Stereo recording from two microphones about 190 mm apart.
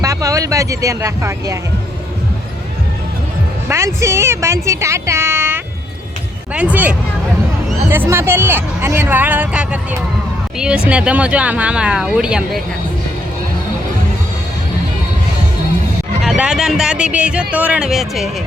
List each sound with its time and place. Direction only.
0.0 s speech: 15° right (ahead or behind)
3.7 s a woman's voice: 15° right (ahead or behind)
10.8 s speech: 5° right (ahead or behind)
16.2 s speech: 5° right (ahead or behind)